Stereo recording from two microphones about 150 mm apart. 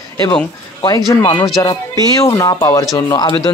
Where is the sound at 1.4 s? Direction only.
25° left (ahead or behind).